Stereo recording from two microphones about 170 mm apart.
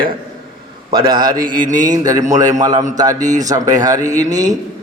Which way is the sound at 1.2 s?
55° right (ahead or behind).